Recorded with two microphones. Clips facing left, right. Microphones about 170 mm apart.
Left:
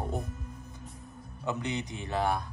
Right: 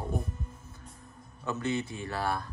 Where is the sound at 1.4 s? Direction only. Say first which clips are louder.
Right 2 dB; 15° left (ahead or behind).